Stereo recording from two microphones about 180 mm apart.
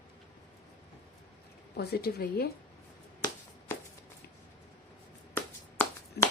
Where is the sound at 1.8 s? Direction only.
60° left (ahead or behind).